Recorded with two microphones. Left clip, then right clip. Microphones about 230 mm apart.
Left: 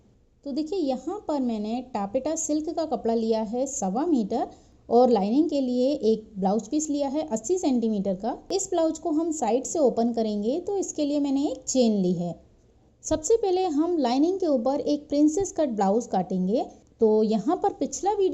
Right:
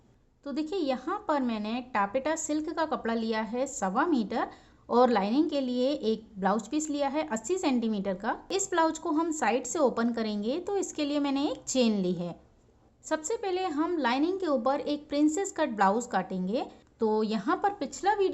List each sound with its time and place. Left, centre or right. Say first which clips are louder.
0.5 s a woman's voice: left 3 dB; centre
13.1 s a woman's voice: left 8 dB; left